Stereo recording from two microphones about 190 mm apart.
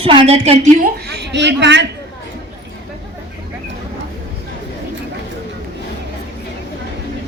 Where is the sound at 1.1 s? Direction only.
65° right (ahead or behind).